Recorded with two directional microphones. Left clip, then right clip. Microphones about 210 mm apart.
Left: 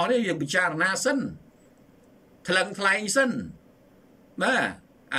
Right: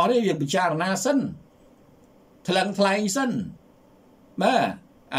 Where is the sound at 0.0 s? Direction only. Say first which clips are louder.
Right 3 dB; 10° right (ahead or behind).